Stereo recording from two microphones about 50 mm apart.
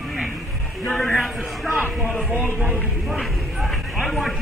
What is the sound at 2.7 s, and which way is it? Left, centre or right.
Speech, centre.